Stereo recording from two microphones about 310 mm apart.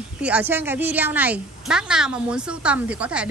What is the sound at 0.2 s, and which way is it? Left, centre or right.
A woman's voice, centre.